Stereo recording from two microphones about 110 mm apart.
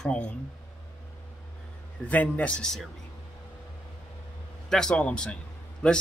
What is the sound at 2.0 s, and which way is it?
Speech, 15° left (ahead or behind).